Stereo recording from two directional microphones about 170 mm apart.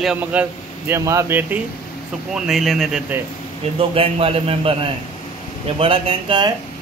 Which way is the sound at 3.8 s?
35° right (ahead or behind).